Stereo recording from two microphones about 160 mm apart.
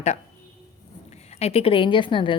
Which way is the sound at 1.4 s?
40° left (ahead or behind).